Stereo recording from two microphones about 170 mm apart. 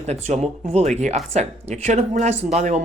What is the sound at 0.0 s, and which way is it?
Speech, 40° right (ahead or behind).